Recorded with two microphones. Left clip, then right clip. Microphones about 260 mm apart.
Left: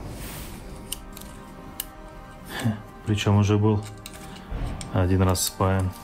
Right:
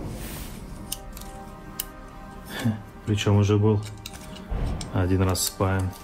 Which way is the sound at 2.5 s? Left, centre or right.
Left.